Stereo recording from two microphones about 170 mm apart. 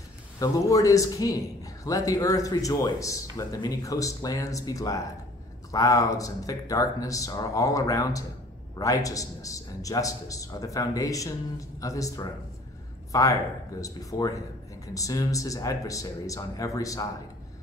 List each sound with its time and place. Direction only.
0.4 s a man's voice: 20° left (ahead or behind)